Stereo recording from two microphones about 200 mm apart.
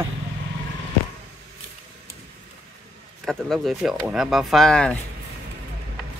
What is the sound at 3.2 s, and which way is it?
Speech, centre (ahead or behind).